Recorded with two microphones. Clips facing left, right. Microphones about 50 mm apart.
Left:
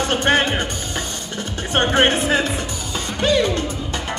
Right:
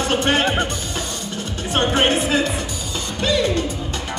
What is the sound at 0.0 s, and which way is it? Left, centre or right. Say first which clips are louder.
Music: left 1 dB; left.